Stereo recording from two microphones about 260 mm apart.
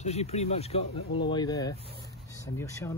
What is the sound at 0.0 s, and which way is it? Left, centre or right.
Speech, left.